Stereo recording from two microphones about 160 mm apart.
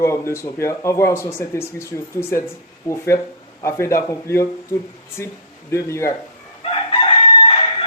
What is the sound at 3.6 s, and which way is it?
A man's voice, 15° left (ahead or behind).